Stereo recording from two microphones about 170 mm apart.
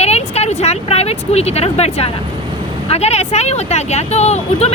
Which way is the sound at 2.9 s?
40° left (ahead or behind).